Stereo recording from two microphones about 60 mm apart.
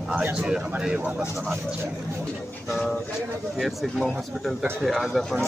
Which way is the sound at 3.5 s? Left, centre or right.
Centre.